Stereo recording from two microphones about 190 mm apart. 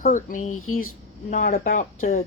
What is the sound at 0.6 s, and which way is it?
Speech, 90° left.